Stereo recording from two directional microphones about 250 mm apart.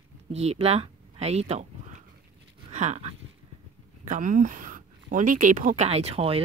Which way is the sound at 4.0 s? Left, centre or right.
Right.